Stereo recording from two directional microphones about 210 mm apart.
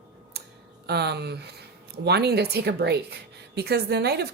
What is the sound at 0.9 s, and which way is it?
Speech, 50° right (ahead or behind).